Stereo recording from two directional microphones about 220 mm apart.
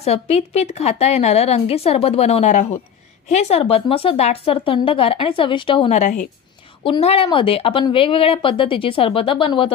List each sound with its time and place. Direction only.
0.0 s a woman's voice: 30° left (ahead or behind)